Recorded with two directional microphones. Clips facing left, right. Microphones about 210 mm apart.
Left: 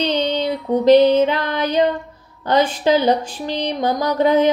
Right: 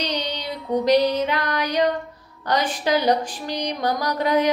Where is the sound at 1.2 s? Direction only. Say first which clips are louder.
Left 5 dB; 30° left (ahead or behind).